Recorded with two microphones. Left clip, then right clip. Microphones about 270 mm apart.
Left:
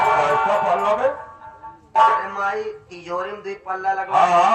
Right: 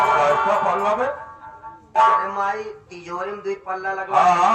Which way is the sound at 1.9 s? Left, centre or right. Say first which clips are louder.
Even; left.